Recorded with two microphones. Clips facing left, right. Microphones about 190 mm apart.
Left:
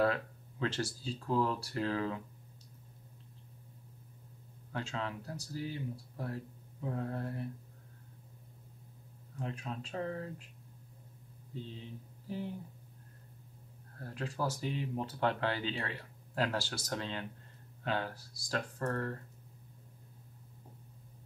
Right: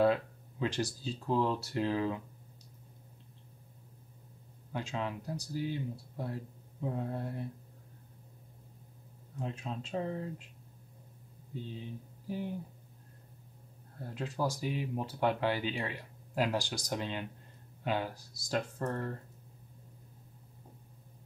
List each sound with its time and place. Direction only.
0.0 s speech: 15° right (ahead or behind)
4.7 s speech: 15° right (ahead or behind)
9.4 s speech: 20° right (ahead or behind)
13.9 s speech: 20° right (ahead or behind)